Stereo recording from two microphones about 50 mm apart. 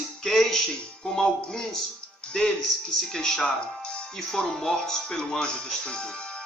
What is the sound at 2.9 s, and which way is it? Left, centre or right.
A man's voice, centre.